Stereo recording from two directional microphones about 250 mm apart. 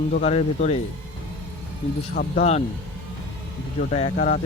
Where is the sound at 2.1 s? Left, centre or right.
Left.